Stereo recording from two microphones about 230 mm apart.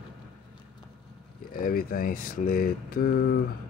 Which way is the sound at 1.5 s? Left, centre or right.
Left.